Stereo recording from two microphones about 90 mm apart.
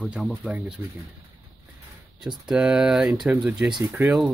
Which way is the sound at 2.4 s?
5° right (ahead or behind).